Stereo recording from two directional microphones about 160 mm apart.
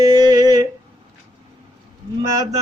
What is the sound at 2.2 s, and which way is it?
Mantra, 20° right (ahead or behind).